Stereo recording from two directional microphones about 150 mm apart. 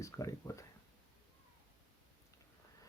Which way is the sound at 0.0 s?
20° left (ahead or behind).